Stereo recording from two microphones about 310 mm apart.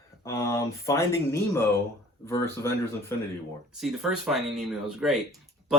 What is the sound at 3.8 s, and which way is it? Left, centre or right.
Speech, centre.